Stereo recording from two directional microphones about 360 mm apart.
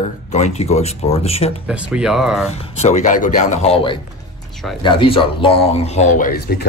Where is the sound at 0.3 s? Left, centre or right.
Centre.